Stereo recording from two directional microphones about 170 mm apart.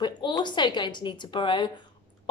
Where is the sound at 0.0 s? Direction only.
25° left (ahead or behind).